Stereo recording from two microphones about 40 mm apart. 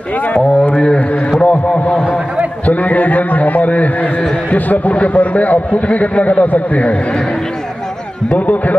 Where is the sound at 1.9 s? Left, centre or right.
Left.